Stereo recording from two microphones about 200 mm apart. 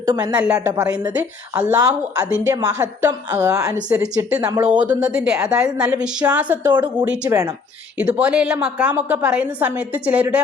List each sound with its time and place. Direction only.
0.0 s a woman's voice: 20° right (ahead or behind)
0.3 s speech: 5° right (ahead or behind)
0.8 s a woman's voice: 15° right (ahead or behind)
4.9 s a woman's voice: 5° right (ahead or behind)